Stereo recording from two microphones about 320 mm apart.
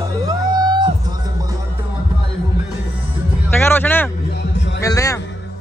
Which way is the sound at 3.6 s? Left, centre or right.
Centre.